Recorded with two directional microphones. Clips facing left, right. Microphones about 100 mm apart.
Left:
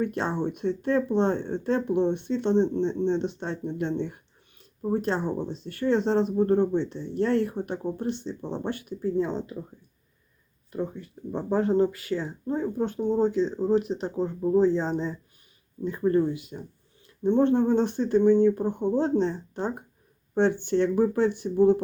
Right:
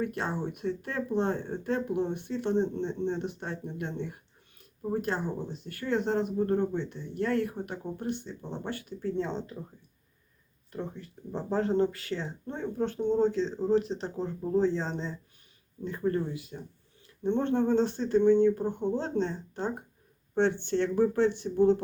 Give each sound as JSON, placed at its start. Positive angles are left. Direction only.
{"t": 0.0, "sound": "speech", "side_deg": 25}
{"t": 11.3, "sound": "speech", "side_deg": 10}
{"t": 16.1, "sound": "speech", "side_deg": 20}